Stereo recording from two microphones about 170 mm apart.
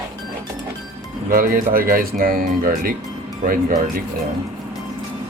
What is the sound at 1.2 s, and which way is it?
Speech, 55° right (ahead or behind).